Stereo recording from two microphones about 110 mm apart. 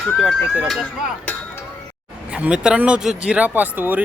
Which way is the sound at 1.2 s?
15° left (ahead or behind).